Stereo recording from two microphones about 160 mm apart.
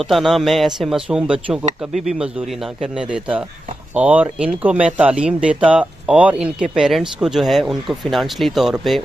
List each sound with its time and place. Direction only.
0.0 s speech: centre (ahead or behind)
2.8 s speech: 5° right (ahead or behind)